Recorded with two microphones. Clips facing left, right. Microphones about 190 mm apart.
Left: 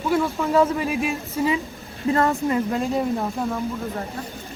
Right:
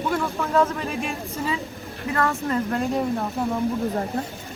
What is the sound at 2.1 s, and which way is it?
Speech, 25° left (ahead or behind).